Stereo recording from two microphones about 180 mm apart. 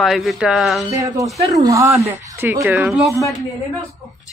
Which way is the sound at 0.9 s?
15° right (ahead or behind).